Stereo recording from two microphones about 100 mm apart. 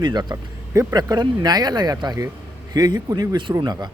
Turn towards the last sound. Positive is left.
turn(degrees=-45)  # may be behind; listen again after turning